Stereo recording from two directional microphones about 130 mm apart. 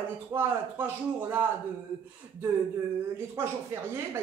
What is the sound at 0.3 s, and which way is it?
Speech, 20° right (ahead or behind).